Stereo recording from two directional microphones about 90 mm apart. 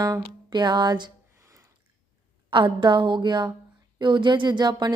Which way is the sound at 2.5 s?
60° right (ahead or behind).